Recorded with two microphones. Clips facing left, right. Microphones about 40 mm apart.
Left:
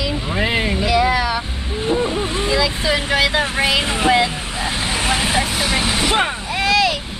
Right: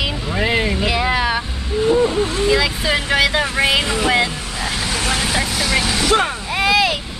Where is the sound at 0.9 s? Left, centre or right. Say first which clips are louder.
Left 3 dB; right.